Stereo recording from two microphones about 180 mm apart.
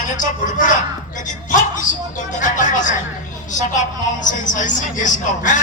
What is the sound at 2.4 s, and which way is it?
Speech, 45° left (ahead or behind).